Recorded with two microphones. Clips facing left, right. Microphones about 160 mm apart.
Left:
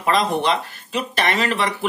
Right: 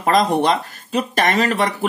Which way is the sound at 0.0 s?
40° right (ahead or behind).